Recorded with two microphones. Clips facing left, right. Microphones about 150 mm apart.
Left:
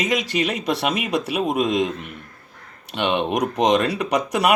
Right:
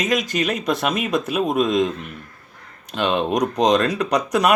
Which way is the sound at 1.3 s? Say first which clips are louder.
Right 2 dB; 15° left (ahead or behind).